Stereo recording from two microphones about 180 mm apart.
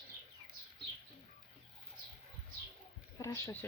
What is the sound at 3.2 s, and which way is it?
Speech, 15° left (ahead or behind).